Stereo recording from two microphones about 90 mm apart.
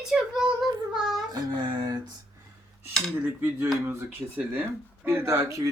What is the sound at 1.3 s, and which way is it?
Speech, 50° right (ahead or behind).